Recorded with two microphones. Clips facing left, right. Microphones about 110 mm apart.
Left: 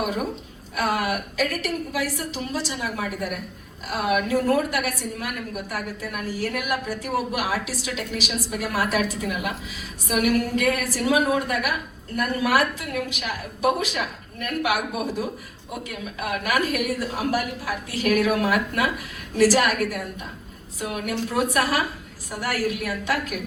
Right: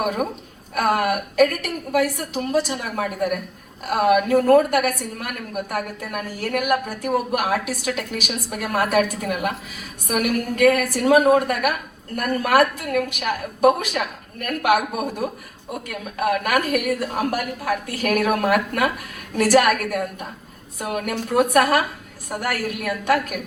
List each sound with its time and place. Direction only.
0.0 s a woman's voice: 50° right (ahead or behind)